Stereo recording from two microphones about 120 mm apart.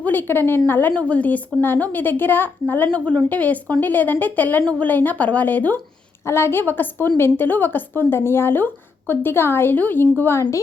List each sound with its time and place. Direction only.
0.0 s a woman's voice: 15° left (ahead or behind)